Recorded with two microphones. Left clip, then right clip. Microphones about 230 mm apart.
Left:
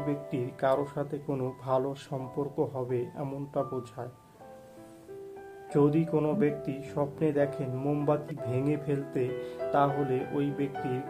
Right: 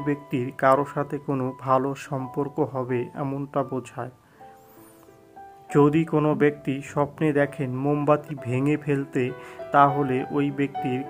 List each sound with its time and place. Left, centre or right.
0.0 s speech: right
5.7 s speech: right